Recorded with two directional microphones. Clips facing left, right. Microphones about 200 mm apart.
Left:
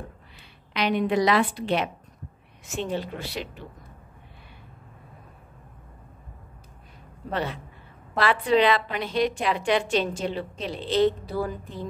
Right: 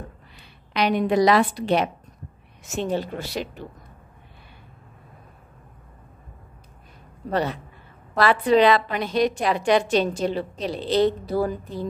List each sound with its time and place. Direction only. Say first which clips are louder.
0.7 s a woman's voice: right 3 dB; 40° right (ahead or behind)
7.2 s a woman's voice: right 5 dB; 40° right (ahead or behind)